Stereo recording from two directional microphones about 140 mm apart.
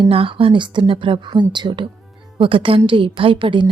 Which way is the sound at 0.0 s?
40° right (ahead or behind).